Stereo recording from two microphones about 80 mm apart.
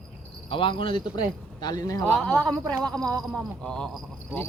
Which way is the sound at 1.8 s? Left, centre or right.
Left.